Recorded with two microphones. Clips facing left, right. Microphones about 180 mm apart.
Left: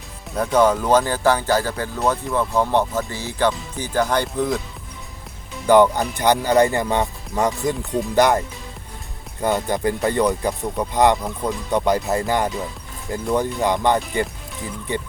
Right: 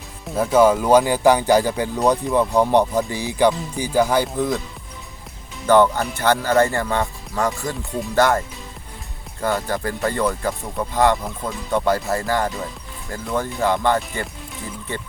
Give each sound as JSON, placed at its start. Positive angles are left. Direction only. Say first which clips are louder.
{"t": 0.3, "sound": "speech", "louder": "right 2 dB", "side_deg": -5}
{"t": 5.6, "sound": "speech", "louder": "left 1 dB", "side_deg": 15}
{"t": 9.4, "sound": "speech", "louder": "left 2 dB", "side_deg": 20}